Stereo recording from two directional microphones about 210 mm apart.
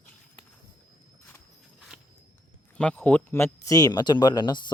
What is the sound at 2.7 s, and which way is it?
Speech, 5° left (ahead or behind).